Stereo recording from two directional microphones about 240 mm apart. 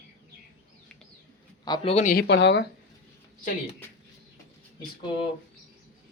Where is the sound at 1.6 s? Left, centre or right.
Centre; by 2.6 s left.